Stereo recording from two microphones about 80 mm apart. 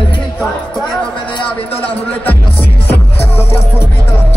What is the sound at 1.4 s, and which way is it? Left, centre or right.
Music, centre.